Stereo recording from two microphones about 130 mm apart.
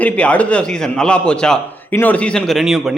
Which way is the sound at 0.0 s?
10° left (ahead or behind).